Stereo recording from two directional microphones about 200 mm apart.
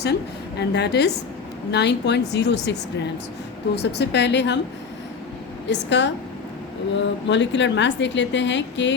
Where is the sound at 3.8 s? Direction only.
55° left (ahead or behind).